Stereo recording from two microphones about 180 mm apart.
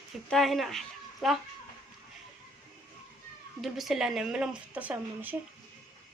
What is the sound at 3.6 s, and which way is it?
Speech, centre (ahead or behind).